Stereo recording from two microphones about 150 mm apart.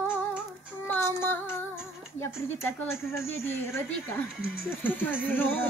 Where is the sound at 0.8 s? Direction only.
15° left (ahead or behind).